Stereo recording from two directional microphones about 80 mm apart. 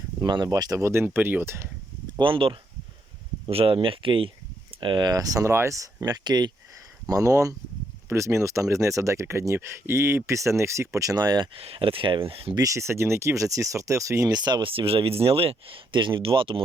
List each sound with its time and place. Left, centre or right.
0.2 s speech: right
0.4 s speech: right
2.1 s speech: right
4.8 s speech: right
5.5 s speech: right
7.1 s speech: right
11.9 s speech: right
12.5 s speech: right
14.3 s speech: right
15.7 s speech: right